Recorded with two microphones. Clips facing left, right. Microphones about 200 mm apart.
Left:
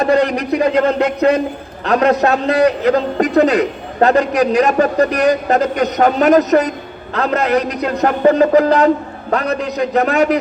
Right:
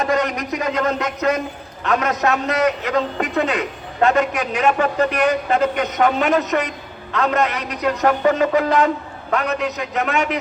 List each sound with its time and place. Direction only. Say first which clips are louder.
0.0 s a man's voice: left 6 dB; 35° left (ahead or behind)